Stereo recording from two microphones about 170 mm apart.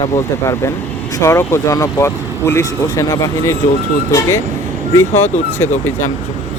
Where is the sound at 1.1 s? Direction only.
20° left (ahead or behind).